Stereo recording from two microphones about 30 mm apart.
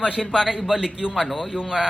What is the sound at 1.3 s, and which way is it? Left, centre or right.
Speech, centre.